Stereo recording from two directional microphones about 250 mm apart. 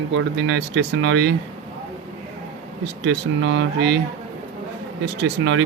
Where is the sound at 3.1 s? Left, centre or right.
Right.